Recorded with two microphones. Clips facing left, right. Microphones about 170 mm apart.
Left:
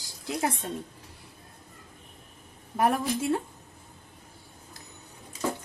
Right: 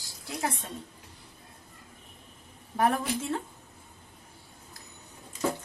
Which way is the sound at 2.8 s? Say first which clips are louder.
Left 1 dB; 5° left (ahead or behind).